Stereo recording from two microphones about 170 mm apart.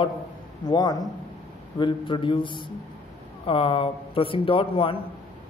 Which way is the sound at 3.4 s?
30° left (ahead or behind).